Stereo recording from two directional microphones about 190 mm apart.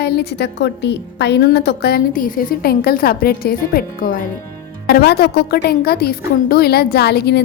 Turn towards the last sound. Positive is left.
turn(degrees=60)  # may be behind; listen again after turning